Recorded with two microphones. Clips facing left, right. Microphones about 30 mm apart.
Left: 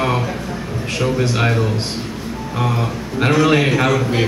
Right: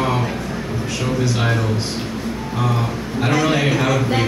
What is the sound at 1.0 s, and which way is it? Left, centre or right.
Speech, left.